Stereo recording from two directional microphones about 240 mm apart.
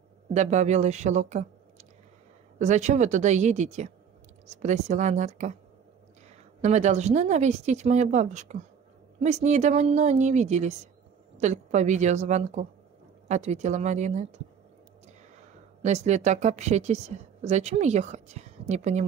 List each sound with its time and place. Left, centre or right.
0.3 s a woman's voice: right
6.6 s speech: right
15.8 s speech: right